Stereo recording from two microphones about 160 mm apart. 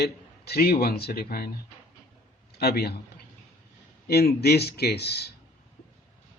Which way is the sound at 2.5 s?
80° left.